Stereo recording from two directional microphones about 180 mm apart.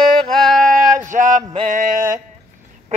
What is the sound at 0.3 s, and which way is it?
Music, centre (ahead or behind).